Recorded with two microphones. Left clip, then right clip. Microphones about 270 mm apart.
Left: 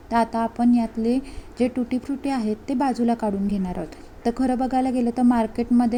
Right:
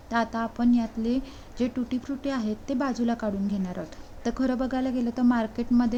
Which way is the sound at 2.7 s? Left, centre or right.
Centre.